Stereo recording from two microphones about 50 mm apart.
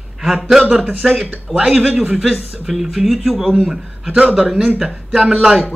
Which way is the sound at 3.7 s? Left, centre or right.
Centre.